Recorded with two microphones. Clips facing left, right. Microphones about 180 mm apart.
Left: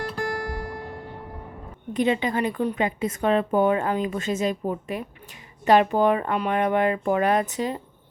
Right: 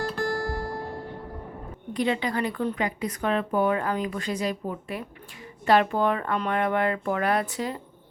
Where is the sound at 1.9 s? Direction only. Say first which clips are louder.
Left 3 dB; 20° left (ahead or behind).